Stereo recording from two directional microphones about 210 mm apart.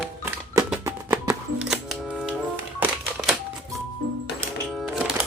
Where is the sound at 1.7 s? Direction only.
Centre (ahead or behind).